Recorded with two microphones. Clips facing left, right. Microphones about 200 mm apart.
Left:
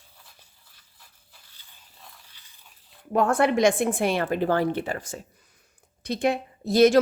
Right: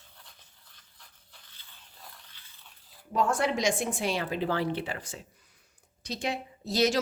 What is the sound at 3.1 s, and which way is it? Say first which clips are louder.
A woman's voice: left 6 dB; 60° left (ahead or behind).